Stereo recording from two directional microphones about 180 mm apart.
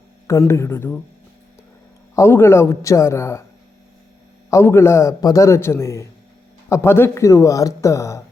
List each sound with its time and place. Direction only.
0.3 s speech: 15° left (ahead or behind)
2.1 s speech: 15° left (ahead or behind)
4.5 s speech: 15° left (ahead or behind)